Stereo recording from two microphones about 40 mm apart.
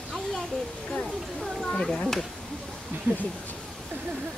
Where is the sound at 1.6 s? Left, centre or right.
Left.